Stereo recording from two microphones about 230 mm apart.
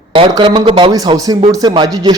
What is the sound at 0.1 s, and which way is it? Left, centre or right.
A man's voice, right.